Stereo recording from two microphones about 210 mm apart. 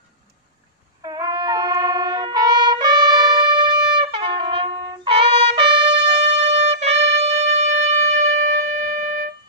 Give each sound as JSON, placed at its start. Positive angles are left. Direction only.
{"t": 1.0, "sound": "trumpet", "side_deg": -20}
{"t": 5.9, "sound": "music", "side_deg": -55}
{"t": 6.3, "sound": "wind instrument", "side_deg": -30}